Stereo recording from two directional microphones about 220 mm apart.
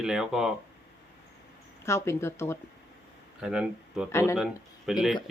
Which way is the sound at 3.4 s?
5° right (ahead or behind).